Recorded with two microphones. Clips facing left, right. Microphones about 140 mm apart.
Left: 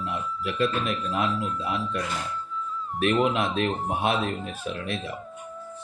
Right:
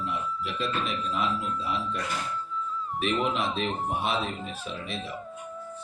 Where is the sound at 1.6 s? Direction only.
50° left (ahead or behind).